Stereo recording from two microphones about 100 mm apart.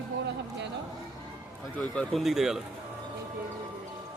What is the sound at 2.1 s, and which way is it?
Speech, centre (ahead or behind).